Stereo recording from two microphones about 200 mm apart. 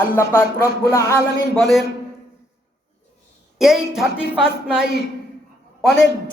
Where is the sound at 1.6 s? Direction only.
Centre (ahead or behind).